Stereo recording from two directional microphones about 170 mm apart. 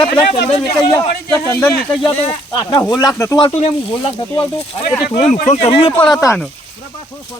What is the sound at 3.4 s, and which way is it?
Speech, 40° left (ahead or behind).